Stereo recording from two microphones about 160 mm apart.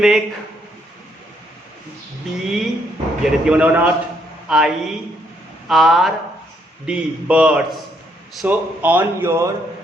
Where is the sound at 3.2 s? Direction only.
5° right (ahead or behind).